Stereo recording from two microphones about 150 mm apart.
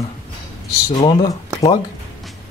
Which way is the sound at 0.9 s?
30° left (ahead or behind).